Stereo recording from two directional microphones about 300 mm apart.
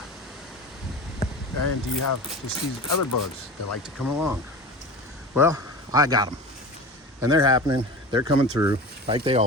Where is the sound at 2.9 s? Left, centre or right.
Left.